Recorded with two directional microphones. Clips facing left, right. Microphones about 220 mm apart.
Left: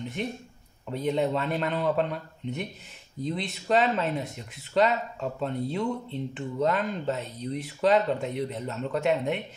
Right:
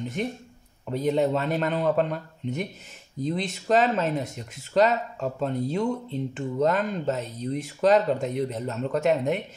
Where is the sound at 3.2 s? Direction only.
45° right (ahead or behind).